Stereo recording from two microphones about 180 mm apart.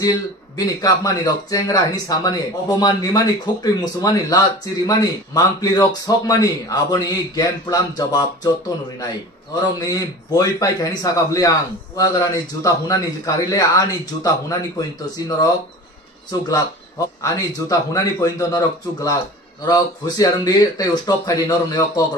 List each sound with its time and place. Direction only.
0.0 s a man's voice: 20° left (ahead or behind)
12.6 s a man's voice: 20° left (ahead or behind)